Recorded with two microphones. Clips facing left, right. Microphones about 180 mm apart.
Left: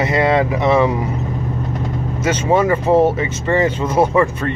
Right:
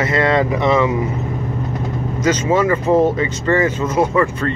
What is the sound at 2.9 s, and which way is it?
Speech, 20° left (ahead or behind).